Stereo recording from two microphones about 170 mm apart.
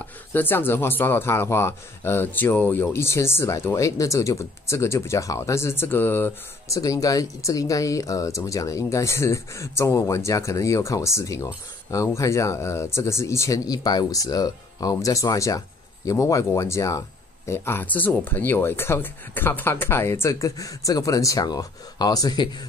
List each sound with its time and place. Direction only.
0.0 s speech: 10° left (ahead or behind)